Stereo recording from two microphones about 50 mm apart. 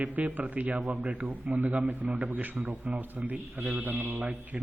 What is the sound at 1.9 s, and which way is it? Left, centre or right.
A man's voice, right.